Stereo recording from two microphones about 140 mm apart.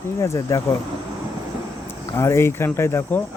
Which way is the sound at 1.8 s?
20° left (ahead or behind).